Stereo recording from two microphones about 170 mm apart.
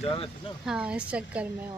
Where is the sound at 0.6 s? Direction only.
5° right (ahead or behind).